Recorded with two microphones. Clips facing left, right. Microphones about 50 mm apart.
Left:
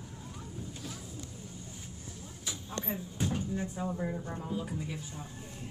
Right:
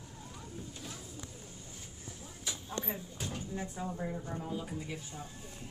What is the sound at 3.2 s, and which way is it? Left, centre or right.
Drawer open or close, left.